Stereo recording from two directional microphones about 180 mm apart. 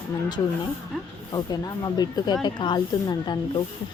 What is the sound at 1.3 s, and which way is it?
Speech, 20° left (ahead or behind).